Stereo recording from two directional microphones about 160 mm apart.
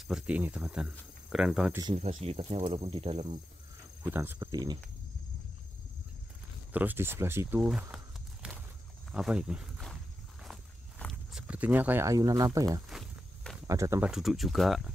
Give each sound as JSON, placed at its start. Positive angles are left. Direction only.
{"t": 0.0, "sound": "speech", "side_deg": -5}
{"t": 2.0, "sound": "speech", "side_deg": -40}
{"t": 4.0, "sound": "speech", "side_deg": -15}
{"t": 4.5, "sound": "speech", "side_deg": -25}
{"t": 6.7, "sound": "speech", "side_deg": -10}
{"t": 7.9, "sound": "walk", "side_deg": -5}
{"t": 9.1, "sound": "speech", "side_deg": -5}
{"t": 10.4, "sound": "walk", "side_deg": 0}
{"t": 11.4, "sound": "speech", "side_deg": -10}
{"t": 12.9, "sound": "walk", "side_deg": 0}
{"t": 13.7, "sound": "speech", "side_deg": -20}
{"t": 14.1, "sound": "speech", "side_deg": 0}